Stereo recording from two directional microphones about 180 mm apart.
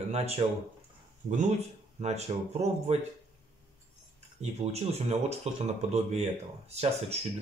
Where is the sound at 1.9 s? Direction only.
40° right (ahead or behind).